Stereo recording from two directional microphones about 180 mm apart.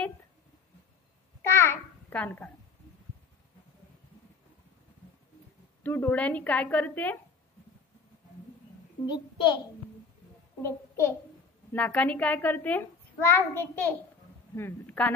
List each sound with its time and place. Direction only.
1.4 s babbling: 15° left (ahead or behind)
5.9 s a child's voice: 10° left (ahead or behind)
9.0 s a child's voice: 25° left (ahead or behind)
10.6 s a child's voice: 15° left (ahead or behind)